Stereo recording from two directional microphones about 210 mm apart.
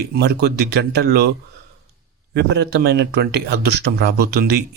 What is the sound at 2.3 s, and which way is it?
Speech, 50° right (ahead or behind).